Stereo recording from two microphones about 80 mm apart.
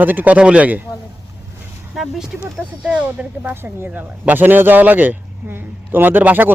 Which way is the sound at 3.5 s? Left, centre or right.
Right.